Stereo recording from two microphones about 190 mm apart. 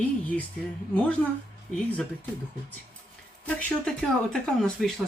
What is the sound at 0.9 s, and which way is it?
Speech, 5° left (ahead or behind).